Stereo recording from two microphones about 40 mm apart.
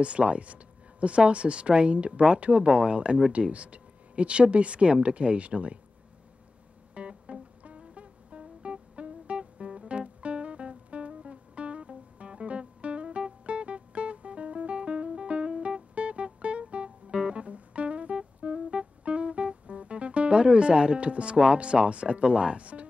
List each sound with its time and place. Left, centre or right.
0.0 s speech: right
6.9 s music: right